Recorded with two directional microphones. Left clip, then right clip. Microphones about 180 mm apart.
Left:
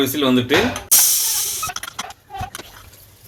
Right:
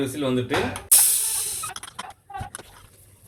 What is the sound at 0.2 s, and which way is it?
Speech, 60° left (ahead or behind).